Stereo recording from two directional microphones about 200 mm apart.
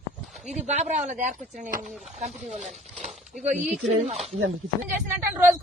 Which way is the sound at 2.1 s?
35° right (ahead or behind).